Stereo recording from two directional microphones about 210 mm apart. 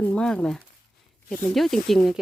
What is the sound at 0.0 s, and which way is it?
Speech, 5° left (ahead or behind).